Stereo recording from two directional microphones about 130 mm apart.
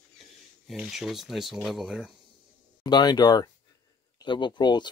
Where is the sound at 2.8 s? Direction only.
35° left (ahead or behind).